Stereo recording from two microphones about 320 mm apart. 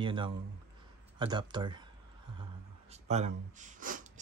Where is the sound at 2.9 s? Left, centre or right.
Right.